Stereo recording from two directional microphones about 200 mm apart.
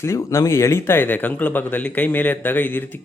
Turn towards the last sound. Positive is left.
turn(degrees=10)  # may be behind; listen again after turning